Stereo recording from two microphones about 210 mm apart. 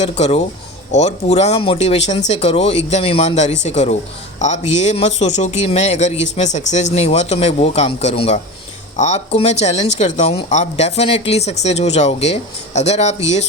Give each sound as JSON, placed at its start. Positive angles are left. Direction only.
{"t": 0.0, "sound": "speech", "side_deg": 30}